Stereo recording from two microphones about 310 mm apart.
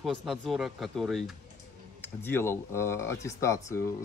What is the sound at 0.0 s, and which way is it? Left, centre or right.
Speech, centre.